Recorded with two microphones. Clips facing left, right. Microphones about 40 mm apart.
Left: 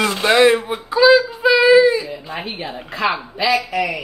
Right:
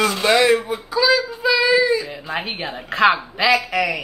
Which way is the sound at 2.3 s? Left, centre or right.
Right.